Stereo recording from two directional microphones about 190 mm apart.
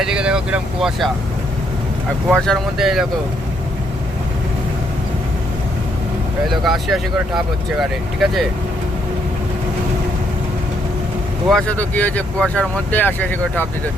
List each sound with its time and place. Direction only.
0.0 s speech: 5° right (ahead or behind)
2.3 s speech: centre (ahead or behind)
6.5 s speech: centre (ahead or behind)
11.4 s speech: 5° left (ahead or behind)